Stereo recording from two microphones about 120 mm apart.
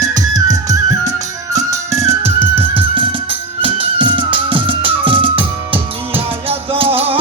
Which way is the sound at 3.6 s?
45° right (ahead or behind).